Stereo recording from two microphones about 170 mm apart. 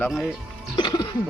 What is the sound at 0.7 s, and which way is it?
Music, 25° left (ahead or behind).